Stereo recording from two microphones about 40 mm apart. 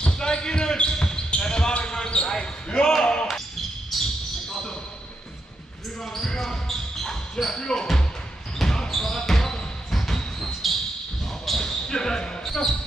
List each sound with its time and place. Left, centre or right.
0.0 s basketball bounce: left
3.9 s basketball bounce: centre
6.0 s basketball bounce: centre
9.8 s a sound: centre
11.4 s basketball bounce: centre
11.9 s basketball bounce: centre